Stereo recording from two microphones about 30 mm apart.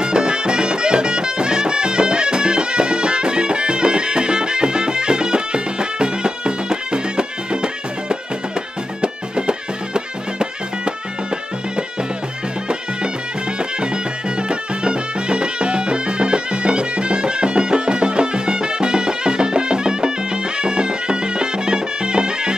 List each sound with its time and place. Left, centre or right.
0.0 s music: right
14.5 s music: right